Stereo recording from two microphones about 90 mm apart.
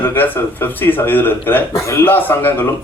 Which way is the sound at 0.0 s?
20° left (ahead or behind).